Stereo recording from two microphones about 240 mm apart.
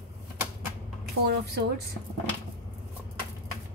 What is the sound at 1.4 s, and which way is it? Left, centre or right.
Speech, right.